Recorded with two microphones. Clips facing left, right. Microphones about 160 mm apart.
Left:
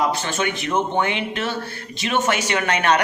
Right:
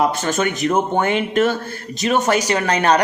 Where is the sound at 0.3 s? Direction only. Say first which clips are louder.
Right 5 dB; 40° right (ahead or behind).